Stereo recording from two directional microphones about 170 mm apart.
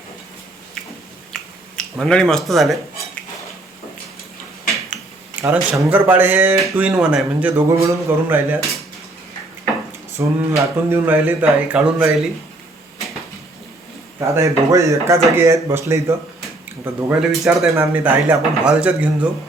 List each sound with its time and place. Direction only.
1.3 s a sound: 5° left (ahead or behind)
5.4 s speech: 10° right (ahead or behind)
10.2 s speech: 15° right (ahead or behind)
14.3 s speech: 15° right (ahead or behind)